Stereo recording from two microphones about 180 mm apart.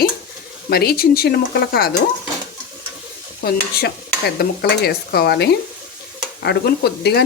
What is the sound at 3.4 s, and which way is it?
Speech, 65° left (ahead or behind).